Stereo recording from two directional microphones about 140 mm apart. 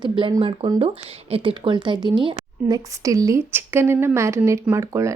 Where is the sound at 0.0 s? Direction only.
35° right (ahead or behind).